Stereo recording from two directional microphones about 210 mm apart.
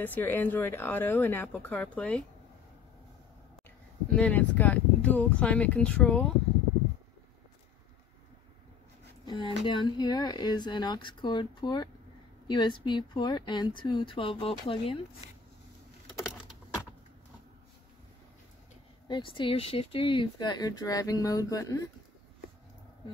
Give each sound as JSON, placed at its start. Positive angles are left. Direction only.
{"t": 0.0, "sound": "speech", "side_deg": 10}
{"t": 4.1, "sound": "speech", "side_deg": 5}
{"t": 9.2, "sound": "speech", "side_deg": 20}
{"t": 19.0, "sound": "speech", "side_deg": 20}